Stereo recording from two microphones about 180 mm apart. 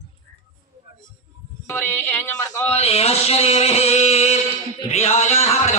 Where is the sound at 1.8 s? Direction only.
10° left (ahead or behind).